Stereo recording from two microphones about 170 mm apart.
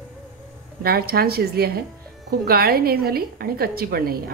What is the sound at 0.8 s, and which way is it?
A woman's voice, 65° right (ahead or behind).